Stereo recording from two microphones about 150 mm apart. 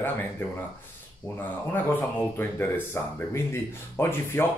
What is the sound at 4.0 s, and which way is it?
Speech, 15° left (ahead or behind).